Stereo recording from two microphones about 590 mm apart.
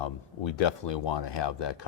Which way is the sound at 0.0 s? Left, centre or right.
Left.